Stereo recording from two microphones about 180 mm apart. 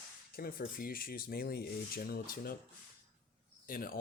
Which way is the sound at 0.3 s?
55° left (ahead or behind).